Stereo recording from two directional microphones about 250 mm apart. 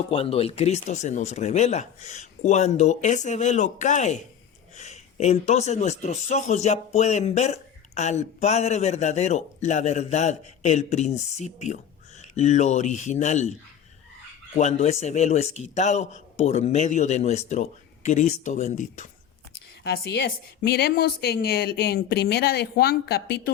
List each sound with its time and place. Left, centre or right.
0.1 s speech: left
14.5 s speech: left
19.8 s a woman's voice: left